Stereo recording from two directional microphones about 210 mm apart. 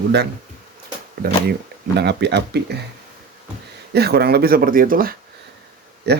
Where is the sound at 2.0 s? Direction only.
55° right (ahead or behind).